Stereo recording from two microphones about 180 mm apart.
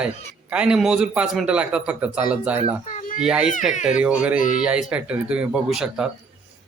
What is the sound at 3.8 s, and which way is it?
Speech, 5° right (ahead or behind).